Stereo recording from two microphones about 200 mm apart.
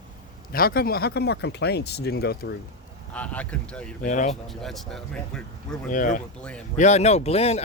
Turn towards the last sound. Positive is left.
turn(degrees=30)  # may be behind; listen again after turning